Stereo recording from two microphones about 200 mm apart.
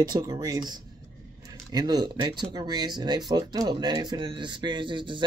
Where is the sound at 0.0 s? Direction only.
20° right (ahead or behind).